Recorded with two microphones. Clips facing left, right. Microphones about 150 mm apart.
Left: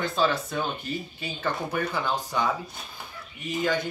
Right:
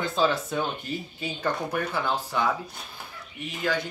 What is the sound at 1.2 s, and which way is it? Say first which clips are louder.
Speech: right 2 dB; centre (ahead or behind).